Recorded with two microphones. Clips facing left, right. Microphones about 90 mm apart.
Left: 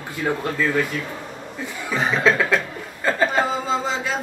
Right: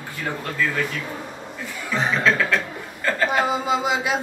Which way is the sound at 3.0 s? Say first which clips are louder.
Left 1 dB; 20° left (ahead or behind).